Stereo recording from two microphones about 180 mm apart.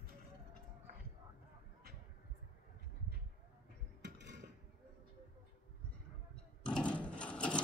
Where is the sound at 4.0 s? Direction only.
70° right (ahead or behind).